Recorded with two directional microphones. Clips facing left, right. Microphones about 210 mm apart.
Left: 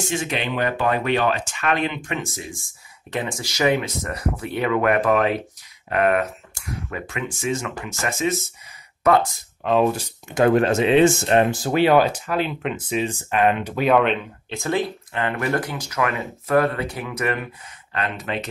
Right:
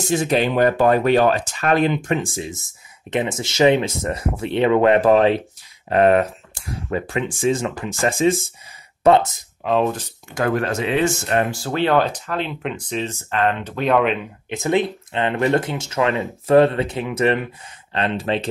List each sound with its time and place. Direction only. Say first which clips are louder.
0.0 s speech: right 7 dB; 40° right (ahead or behind); by 9.4 s 25° right (ahead or behind)
9.6 s speech: even; centre (ahead or behind)
10.3 s speech: left 4 dB; 25° left (ahead or behind)
11.7 s speech: left 1 dB; 10° left (ahead or behind)
14.5 s speech: right 4 dB; 20° right (ahead or behind)